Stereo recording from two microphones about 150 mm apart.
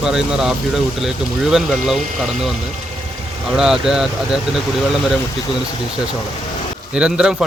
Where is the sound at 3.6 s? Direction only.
5° right (ahead or behind).